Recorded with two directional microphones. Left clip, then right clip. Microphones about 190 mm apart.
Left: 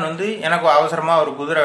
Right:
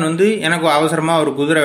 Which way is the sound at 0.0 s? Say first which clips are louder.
Right 6 dB; 40° right (ahead or behind).